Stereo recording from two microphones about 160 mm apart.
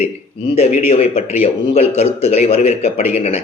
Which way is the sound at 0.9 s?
40° left (ahead or behind).